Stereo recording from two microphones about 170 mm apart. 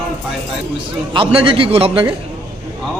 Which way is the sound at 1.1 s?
30° right (ahead or behind).